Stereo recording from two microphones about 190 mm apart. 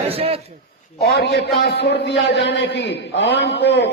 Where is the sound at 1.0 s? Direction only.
60° left (ahead or behind).